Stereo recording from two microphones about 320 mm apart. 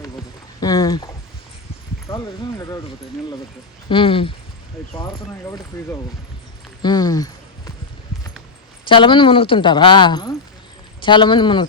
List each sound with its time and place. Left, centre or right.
0.6 s a woman's voice: centre
3.8 s a woman's voice: centre
5.7 s a woman's voice: centre
8.9 s a woman's voice: centre